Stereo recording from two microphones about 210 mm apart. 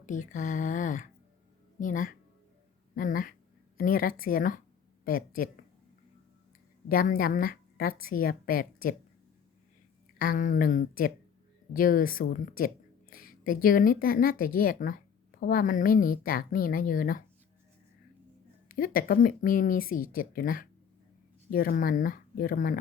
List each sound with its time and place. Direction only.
0.0 s speech: 40° left (ahead or behind)
6.8 s a woman's voice: 40° left (ahead or behind)
10.2 s speech: 40° left (ahead or behind)
18.7 s speech: 45° left (ahead or behind)